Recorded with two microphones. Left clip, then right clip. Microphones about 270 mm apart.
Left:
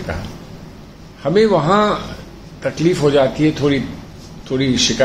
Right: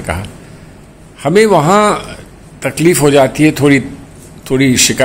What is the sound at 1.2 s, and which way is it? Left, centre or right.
Speech, right.